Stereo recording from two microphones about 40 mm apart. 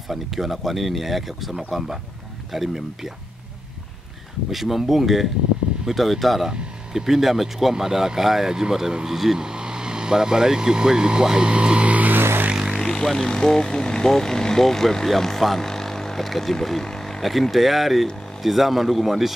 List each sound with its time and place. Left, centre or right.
0.1 s speech: centre
4.5 s speech: centre
6.5 s speech: centre
9.4 s speech: centre; by 12.1 s right
12.9 s speech: centre
17.2 s speech: centre